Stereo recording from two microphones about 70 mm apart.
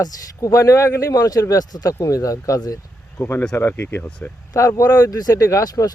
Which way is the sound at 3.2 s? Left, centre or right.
Left.